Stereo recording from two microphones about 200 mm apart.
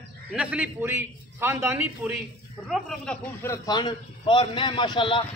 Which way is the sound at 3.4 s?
15° left (ahead or behind).